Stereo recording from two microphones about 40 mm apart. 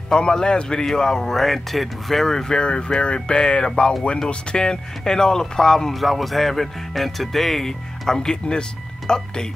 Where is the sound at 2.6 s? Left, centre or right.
Left.